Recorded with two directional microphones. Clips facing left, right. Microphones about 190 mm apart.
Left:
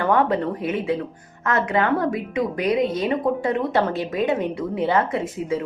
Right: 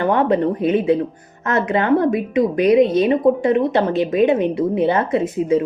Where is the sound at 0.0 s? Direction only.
20° right (ahead or behind).